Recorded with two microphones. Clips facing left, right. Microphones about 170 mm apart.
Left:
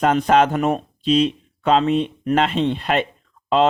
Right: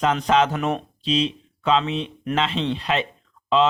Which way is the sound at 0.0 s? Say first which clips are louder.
Left 4 dB; 50° left (ahead or behind).